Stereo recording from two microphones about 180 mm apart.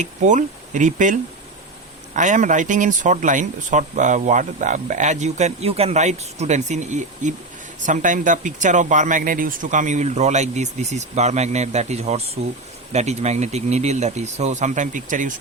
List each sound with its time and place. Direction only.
0.0 s speech: 45° right (ahead or behind)